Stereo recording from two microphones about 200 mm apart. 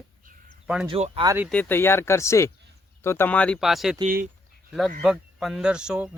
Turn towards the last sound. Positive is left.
turn(degrees=-5)  # may be behind; listen again after turning